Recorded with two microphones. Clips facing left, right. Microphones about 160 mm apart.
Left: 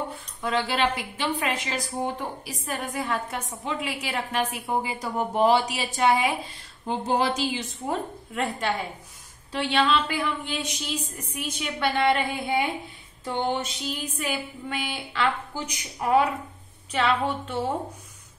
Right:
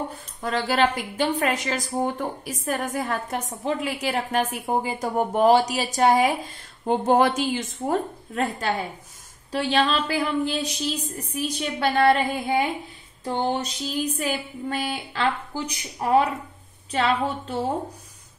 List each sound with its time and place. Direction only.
0.1 s a woman's voice: 40° right (ahead or behind)